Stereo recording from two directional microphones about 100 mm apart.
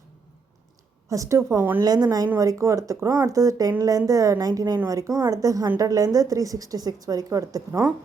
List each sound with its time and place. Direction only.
1.1 s a woman's voice: 30° right (ahead or behind)
1.8 s speech: 40° right (ahead or behind)